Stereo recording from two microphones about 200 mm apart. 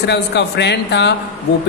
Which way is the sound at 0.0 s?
60° left (ahead or behind).